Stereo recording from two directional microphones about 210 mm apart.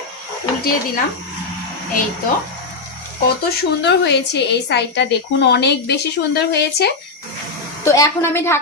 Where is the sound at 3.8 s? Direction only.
55° left (ahead or behind).